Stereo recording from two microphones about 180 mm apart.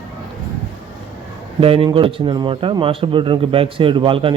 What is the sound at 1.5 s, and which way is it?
A man's voice, 30° right (ahead or behind).